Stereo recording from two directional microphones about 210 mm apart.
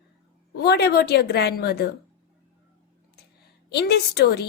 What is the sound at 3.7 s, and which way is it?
Speech, 50° left (ahead or behind).